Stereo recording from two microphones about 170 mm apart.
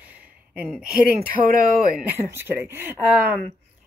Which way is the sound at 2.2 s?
15° right (ahead or behind).